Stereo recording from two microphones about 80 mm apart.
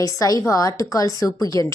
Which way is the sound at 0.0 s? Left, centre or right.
Left.